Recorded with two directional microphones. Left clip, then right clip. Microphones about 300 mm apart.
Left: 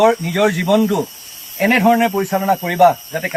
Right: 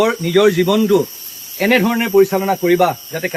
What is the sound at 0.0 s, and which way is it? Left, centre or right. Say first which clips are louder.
Speech: even; centre.